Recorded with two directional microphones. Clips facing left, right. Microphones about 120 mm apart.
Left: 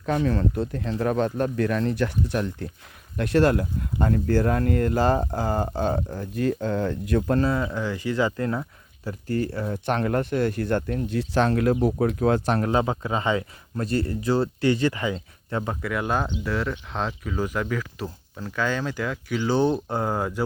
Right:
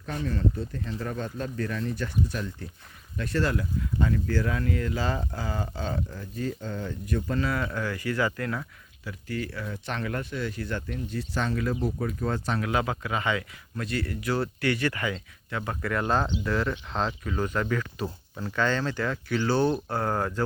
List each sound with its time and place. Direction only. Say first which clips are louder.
0.0 s speech: left 6 dB; 70° left (ahead or behind); by 6.2 s 50° left (ahead or behind)
6.3 s speech: left 8 dB; 65° left (ahead or behind)
7.6 s speech: left 3 dB; 15° left (ahead or behind)
9.0 s speech: left 7 dB; 40° left (ahead or behind)
9.8 s speech: left 9 dB; 50° left (ahead or behind)
11.1 s speech: left 8 dB; 70° left (ahead or behind)
12.5 s speech: left 5 dB; 35° left (ahead or behind)
15.8 s speech: right 2 dB; 5° left (ahead or behind)